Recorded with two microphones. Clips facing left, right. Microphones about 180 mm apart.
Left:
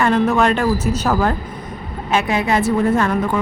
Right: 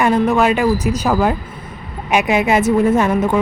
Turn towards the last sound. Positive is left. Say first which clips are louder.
# right 3 dB
turn(degrees=-15)  # may be behind; listen again after turning